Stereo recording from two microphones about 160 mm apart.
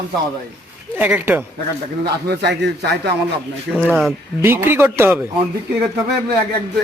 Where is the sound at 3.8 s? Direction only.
Centre (ahead or behind).